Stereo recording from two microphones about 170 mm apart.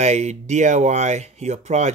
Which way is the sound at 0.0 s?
40° right (ahead or behind).